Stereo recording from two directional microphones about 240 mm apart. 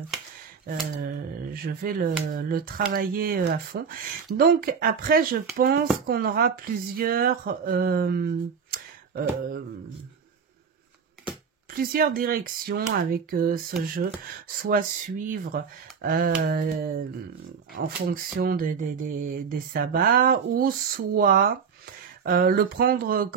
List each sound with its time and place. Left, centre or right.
0.7 s speech: right
11.7 s speech: right
14.6 s speech: right